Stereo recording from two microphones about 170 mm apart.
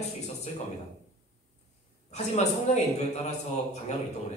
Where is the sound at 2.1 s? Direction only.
40° left (ahead or behind).